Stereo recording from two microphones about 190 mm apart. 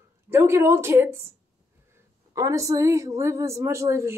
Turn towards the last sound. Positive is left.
turn(degrees=-15)  # may be behind; listen again after turning